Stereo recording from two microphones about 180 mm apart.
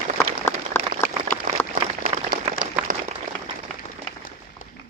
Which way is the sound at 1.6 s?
10° left (ahead or behind).